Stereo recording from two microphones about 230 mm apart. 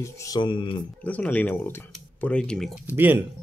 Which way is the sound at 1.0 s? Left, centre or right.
Centre.